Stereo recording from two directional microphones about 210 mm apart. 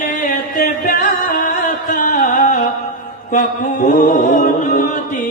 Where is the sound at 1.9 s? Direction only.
40° left (ahead or behind).